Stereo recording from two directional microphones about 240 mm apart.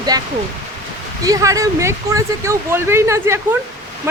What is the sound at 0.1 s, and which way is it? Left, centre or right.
Speech, centre.